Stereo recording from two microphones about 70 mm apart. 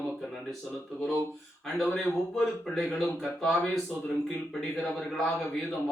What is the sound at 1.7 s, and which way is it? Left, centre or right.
Speech, centre.